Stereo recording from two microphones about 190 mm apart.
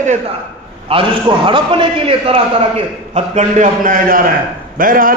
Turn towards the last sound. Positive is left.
turn(degrees=-45)  # may be behind; listen again after turning